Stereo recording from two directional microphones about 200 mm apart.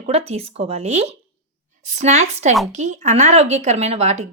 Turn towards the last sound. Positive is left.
turn(degrees=-35)  # may be behind; listen again after turning